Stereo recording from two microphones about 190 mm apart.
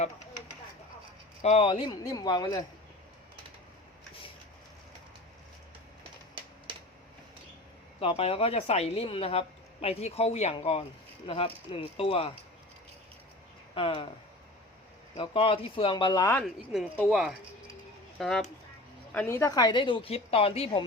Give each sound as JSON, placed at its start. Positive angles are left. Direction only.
{"t": 1.4, "sound": "a woman's voice", "side_deg": 35}
{"t": 7.9, "sound": "a woman's voice", "side_deg": 30}
{"t": 13.7, "sound": "a woman's voice", "side_deg": 30}
{"t": 15.1, "sound": "a woman's voice", "side_deg": 25}
{"t": 16.4, "sound": "speech", "side_deg": 0}
{"t": 19.1, "sound": "a woman's voice", "side_deg": 15}